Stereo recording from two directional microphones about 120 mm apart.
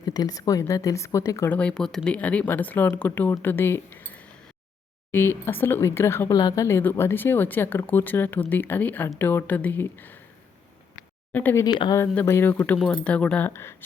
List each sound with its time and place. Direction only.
0.0 s speech: 35° left (ahead or behind)
1.5 s speech: 10° left (ahead or behind)
11.3 s speech: 15° left (ahead or behind)
11.6 s speech: 35° left (ahead or behind)
11.9 s speech: 20° left (ahead or behind)